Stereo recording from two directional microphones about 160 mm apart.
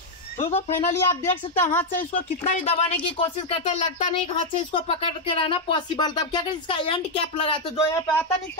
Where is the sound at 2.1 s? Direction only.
40° left (ahead or behind).